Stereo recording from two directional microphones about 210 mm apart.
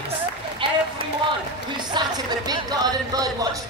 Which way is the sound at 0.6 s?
25° right (ahead or behind).